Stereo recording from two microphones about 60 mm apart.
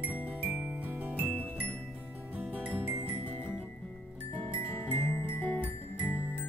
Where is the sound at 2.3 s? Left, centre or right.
Right.